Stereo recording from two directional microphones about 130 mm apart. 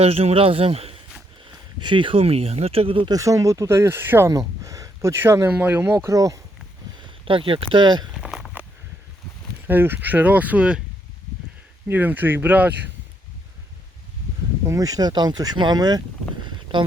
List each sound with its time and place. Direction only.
0.0 s speech: 50° right (ahead or behind)
1.8 s speech: 40° right (ahead or behind)
3.1 s speech: 25° right (ahead or behind)
7.3 s speech: 40° right (ahead or behind)
8.2 s a sound: 5° right (ahead or behind)
9.6 s speech: 15° right (ahead or behind)
11.9 s speech: 15° right (ahead or behind)
14.7 s speech: 30° right (ahead or behind)